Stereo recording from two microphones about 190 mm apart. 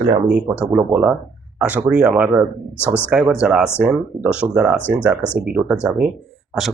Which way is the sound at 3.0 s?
5° right (ahead or behind).